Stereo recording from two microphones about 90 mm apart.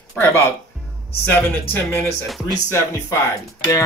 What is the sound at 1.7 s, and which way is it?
Speech, 20° left (ahead or behind).